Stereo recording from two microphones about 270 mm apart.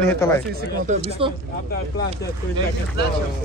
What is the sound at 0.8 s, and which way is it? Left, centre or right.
Speech, right.